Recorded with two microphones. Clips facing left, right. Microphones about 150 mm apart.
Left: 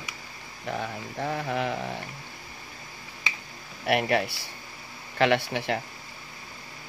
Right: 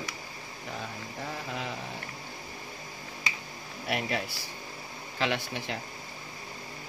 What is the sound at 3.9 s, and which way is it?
Speech, 65° left (ahead or behind).